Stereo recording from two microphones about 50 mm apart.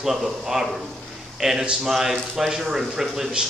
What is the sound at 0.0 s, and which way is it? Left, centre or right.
Speech, centre.